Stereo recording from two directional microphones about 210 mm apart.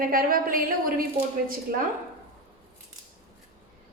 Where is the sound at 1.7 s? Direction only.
45° right (ahead or behind).